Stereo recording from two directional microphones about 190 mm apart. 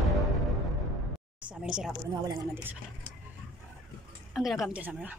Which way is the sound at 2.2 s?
15° right (ahead or behind).